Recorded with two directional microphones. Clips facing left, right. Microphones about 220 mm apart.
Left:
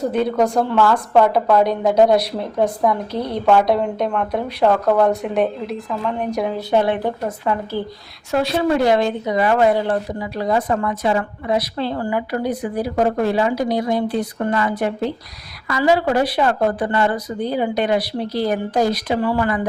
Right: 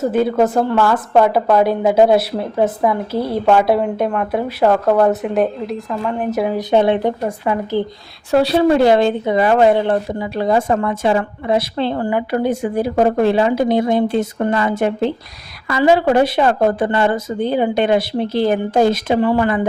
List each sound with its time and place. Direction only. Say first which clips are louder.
0.0 s a woman's voice: right 3 dB; 5° right (ahead or behind)
6.6 s a woman's voice: right 4 dB; 20° right (ahead or behind)
7.3 s speech: right 3 dB; 10° right (ahead or behind)
8.3 s a woman's voice: right 5 dB; 35° right (ahead or behind)